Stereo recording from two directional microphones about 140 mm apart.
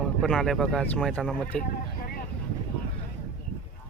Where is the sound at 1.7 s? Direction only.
90° left.